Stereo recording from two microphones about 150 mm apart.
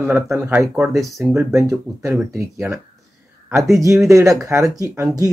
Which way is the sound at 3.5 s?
Centre (ahead or behind).